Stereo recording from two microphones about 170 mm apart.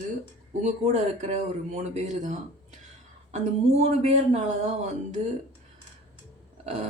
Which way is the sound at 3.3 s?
40° right (ahead or behind).